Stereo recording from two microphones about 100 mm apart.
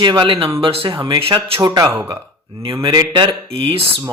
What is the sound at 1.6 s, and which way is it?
Speech, 40° right (ahead or behind).